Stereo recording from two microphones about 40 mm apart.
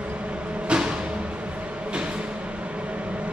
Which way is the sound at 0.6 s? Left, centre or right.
Right.